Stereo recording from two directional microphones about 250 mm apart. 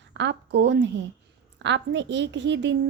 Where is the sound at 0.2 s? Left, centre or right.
Right.